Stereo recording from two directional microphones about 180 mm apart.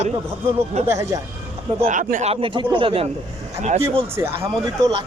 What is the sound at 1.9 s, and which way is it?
Speech, 45° right (ahead or behind).